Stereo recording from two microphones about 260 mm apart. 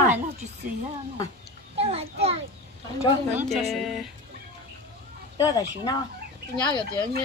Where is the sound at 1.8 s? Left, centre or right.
Right.